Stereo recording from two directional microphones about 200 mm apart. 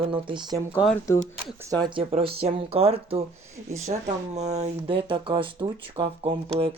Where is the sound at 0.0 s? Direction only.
25° right (ahead or behind).